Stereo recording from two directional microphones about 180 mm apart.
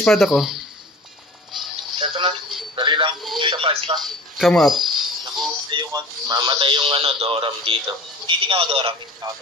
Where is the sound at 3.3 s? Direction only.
25° right (ahead or behind).